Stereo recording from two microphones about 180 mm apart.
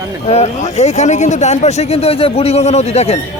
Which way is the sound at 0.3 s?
35° left (ahead or behind).